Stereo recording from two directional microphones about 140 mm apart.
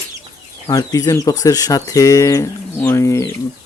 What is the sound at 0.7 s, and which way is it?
Speech, 25° left (ahead or behind).